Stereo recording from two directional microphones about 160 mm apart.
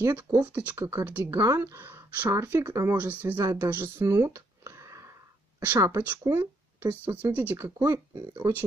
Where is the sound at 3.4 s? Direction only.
20° right (ahead or behind).